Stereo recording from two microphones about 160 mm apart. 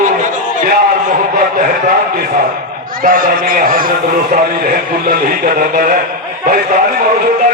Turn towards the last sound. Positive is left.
turn(degrees=-60)  # may be behind; listen again after turning